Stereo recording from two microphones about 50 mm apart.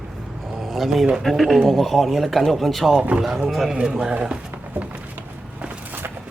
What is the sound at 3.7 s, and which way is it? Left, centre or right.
Speech, centre.